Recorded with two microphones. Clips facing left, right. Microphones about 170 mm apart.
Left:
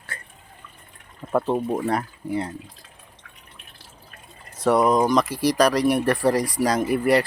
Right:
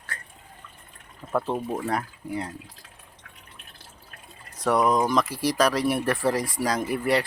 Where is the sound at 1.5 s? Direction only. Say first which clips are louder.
Left 5 dB; 15° left (ahead or behind).